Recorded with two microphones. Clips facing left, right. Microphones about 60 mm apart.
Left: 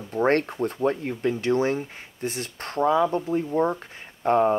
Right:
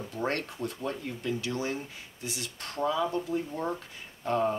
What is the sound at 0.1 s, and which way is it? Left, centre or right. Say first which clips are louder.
Speech: left 11 dB; left.